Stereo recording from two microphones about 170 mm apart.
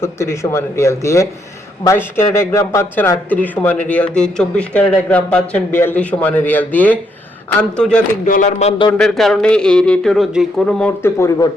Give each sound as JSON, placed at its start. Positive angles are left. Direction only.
{"t": 0.0, "sound": "a man's voice", "side_deg": 15}
{"t": 8.2, "sound": "speech", "side_deg": 45}
{"t": 8.9, "sound": "a man's voice", "side_deg": 5}